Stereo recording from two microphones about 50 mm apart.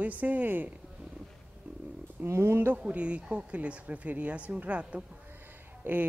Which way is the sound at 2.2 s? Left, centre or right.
Right.